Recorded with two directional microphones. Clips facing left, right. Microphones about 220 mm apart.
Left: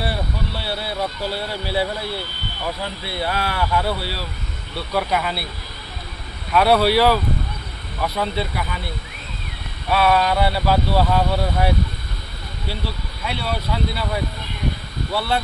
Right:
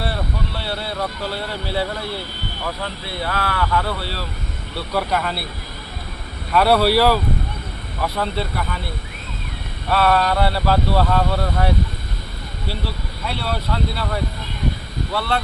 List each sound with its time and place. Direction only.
0.6 s speech: 5° left (ahead or behind)
3.3 s speech: 20° left (ahead or behind)
3.8 s speech: 5° left (ahead or behind)
6.5 s speech: 5° right (ahead or behind)
9.8 s speech: 5° left (ahead or behind)
13.2 s speech: centre (ahead or behind)